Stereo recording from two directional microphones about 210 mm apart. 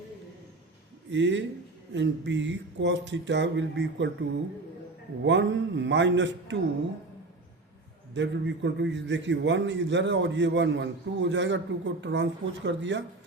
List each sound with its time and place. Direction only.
1.1 s a man's voice: 60° right (ahead or behind)
5.2 s a man's voice: 60° right (ahead or behind)
8.1 s a man's voice: 60° right (ahead or behind)